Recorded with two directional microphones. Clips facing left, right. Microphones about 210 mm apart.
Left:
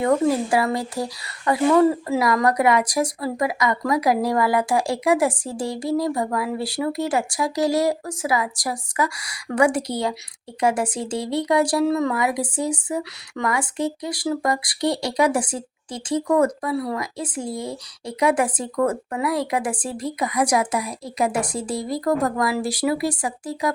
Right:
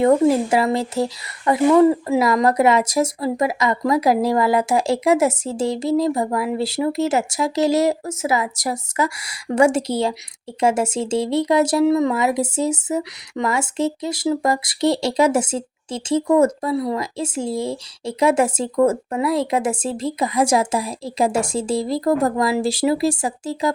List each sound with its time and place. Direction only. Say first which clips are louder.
0.5 s speech: right 3 dB; 25° right (ahead or behind)